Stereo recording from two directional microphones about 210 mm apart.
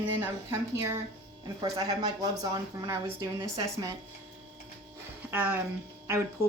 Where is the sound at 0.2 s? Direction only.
10° right (ahead or behind).